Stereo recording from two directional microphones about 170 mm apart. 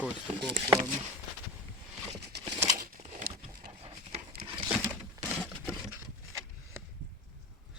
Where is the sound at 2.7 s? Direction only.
55° right (ahead or behind).